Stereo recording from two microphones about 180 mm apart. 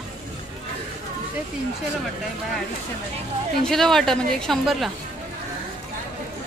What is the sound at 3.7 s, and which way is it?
Speech, centre (ahead or behind).